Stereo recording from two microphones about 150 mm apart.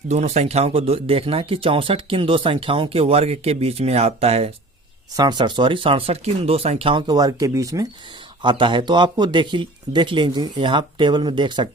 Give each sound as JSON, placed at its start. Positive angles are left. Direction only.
{"t": 0.1, "sound": "speech", "side_deg": -45}
{"t": 5.1, "sound": "speech", "side_deg": -30}
{"t": 8.4, "sound": "speech", "side_deg": -30}